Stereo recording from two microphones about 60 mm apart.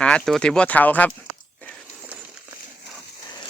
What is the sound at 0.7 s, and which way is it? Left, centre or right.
Speech, left.